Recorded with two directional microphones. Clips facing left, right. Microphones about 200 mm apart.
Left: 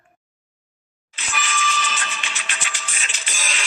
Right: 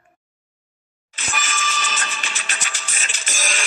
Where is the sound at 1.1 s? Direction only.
45° right (ahead or behind).